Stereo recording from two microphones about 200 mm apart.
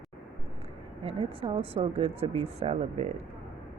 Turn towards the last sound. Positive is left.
turn(degrees=-35)  # may be behind; listen again after turning